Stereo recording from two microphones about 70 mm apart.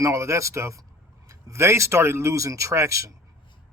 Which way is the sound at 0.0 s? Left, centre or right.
Right.